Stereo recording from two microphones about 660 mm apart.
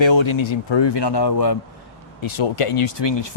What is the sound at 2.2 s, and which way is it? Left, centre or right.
Speech, left.